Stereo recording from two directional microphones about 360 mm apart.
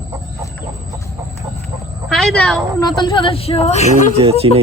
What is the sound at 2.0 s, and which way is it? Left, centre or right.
A woman's voice, centre.